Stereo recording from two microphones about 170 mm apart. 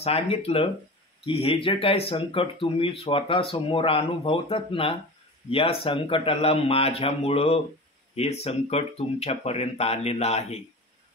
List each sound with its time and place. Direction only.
0.0 s speech: 35° left (ahead or behind)